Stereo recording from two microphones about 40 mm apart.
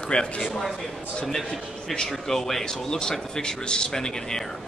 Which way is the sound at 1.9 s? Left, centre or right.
Centre.